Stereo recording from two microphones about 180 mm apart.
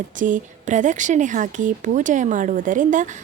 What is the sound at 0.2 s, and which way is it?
Speech, 45° right (ahead or behind).